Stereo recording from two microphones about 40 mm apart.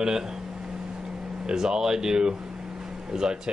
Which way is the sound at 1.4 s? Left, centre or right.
Centre.